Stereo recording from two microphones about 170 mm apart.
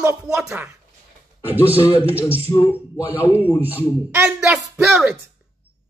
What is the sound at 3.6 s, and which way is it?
Speech, 10° right (ahead or behind).